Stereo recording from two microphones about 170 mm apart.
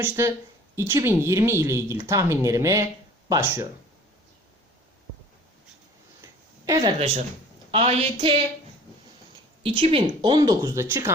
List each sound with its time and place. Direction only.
0.0 s a woman's voice: 15° right (ahead or behind)
6.2 s a sound: 20° right (ahead or behind)
7.7 s a woman's voice: 35° right (ahead or behind)
9.6 s speech: 35° right (ahead or behind); by 11.1 s 15° right (ahead or behind)